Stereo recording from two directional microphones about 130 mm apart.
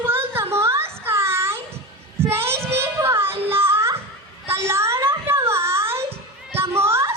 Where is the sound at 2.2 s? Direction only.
20° right (ahead or behind).